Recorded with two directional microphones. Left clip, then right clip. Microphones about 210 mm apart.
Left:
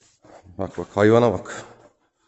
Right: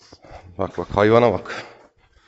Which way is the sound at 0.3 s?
10° left (ahead or behind).